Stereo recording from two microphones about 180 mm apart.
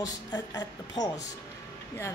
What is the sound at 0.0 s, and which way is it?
A woman's voice, 20° left (ahead or behind).